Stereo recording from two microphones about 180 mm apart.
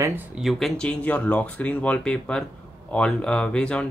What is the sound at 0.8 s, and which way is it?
Speech, 5° left (ahead or behind).